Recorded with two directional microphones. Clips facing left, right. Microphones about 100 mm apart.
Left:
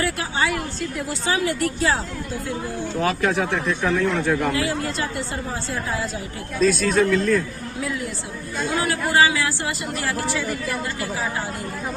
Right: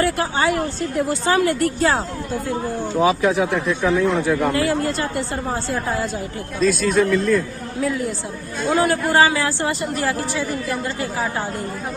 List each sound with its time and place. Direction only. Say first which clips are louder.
0.0 s a woman's voice: right 4 dB; 45° right (ahead or behind)
3.0 s a man's voice: right 5 dB; 5° right (ahead or behind)
4.5 s a woman's voice: right 4 dB; 40° right (ahead or behind)
6.6 s a man's voice: right 1 dB; centre (ahead or behind)
8.6 s speech: right 6 dB; 40° right (ahead or behind)